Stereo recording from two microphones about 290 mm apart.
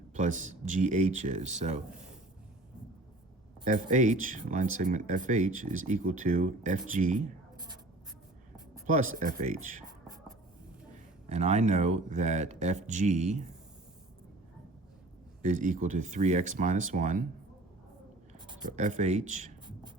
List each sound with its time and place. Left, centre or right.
0.1 s speech: right
3.6 s speech: right
8.9 s speech: right
11.3 s speech: right
15.4 s speech: right
18.4 s speech: right